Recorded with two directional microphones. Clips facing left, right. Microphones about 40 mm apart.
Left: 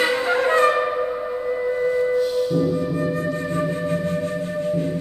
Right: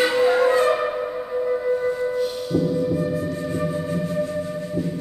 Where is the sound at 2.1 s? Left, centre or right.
Centre.